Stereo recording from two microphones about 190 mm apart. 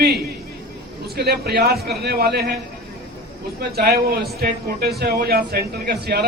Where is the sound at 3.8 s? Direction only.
55° right (ahead or behind).